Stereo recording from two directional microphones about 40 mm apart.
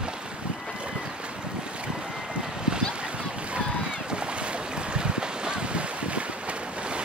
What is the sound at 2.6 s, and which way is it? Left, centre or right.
Boat, right.